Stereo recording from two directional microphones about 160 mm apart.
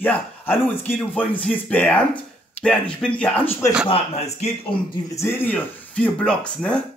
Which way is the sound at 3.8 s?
40° left (ahead or behind).